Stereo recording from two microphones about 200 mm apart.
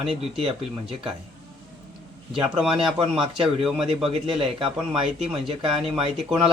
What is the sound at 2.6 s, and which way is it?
Speech, centre (ahead or behind).